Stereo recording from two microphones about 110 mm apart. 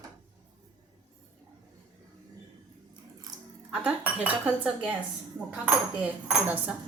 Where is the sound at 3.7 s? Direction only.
10° right (ahead or behind).